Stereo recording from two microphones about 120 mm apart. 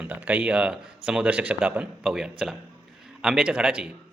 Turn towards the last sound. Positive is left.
turn(degrees=-10)  # may be behind; listen again after turning